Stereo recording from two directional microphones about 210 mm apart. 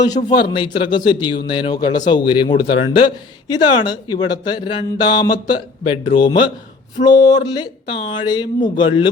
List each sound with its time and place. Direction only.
0.3 s speech: 20° left (ahead or behind)